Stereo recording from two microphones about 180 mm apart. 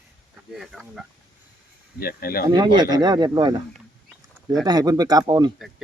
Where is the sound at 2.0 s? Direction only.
55° left (ahead or behind).